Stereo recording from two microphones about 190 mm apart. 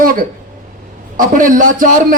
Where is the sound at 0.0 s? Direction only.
45° right (ahead or behind).